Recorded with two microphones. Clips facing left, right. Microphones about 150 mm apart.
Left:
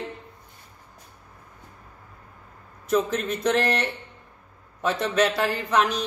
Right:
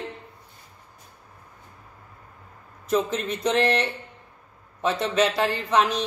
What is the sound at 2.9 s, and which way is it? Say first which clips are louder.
Speech: left 1 dB; centre (ahead or behind).